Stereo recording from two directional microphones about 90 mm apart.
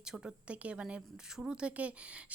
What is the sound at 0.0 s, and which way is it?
Speech, 10° right (ahead or behind).